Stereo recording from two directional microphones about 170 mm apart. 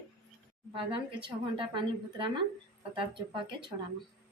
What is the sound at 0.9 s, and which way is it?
Speech, 30° right (ahead or behind).